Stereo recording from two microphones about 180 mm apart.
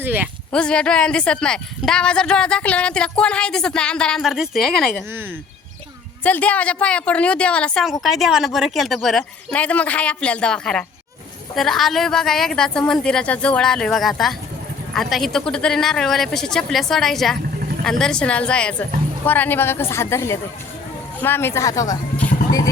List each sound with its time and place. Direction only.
0.0 s speech: 10° right (ahead or behind)
0.5 s a woman's voice: 5° left (ahead or behind)
6.2 s a woman's voice: 10° left (ahead or behind)